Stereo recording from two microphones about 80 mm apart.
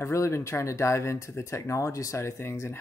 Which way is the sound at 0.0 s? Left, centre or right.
Left.